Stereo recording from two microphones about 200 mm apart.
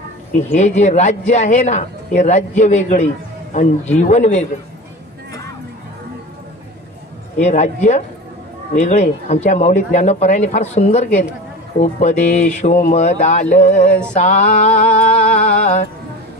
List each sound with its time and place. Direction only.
0.6 s a man's voice: 35° left (ahead or behind)
7.3 s a man's voice: 35° left (ahead or behind)
14.7 s a sound: 5° left (ahead or behind)
15.6 s music: 35° left (ahead or behind)